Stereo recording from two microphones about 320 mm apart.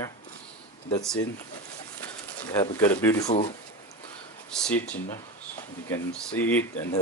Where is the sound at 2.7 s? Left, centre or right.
Centre.